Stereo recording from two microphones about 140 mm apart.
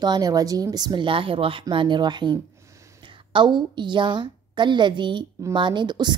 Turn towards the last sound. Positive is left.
turn(degrees=-30)  # may be behind; listen again after turning